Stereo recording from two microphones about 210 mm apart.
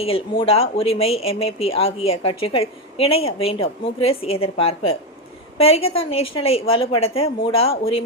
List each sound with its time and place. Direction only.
0.0 s speech: 25° left (ahead or behind)